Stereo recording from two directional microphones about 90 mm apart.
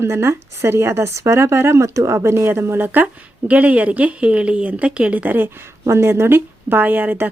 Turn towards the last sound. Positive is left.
turn(degrees=-20)  # may be behind; listen again after turning